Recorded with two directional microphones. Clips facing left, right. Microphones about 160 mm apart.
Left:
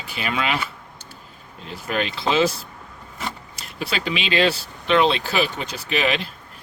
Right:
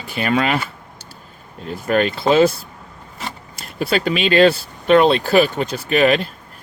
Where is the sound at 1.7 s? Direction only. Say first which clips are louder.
Right 8 dB; 45° right (ahead or behind).